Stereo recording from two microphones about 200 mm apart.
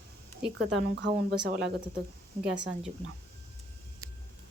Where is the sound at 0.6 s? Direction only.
70° right (ahead or behind).